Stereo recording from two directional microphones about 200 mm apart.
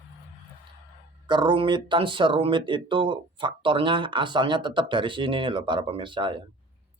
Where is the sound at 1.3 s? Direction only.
25° right (ahead or behind).